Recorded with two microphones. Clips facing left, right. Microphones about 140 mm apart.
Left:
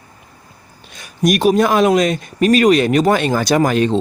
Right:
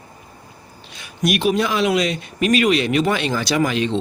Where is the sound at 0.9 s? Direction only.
40° left (ahead or behind).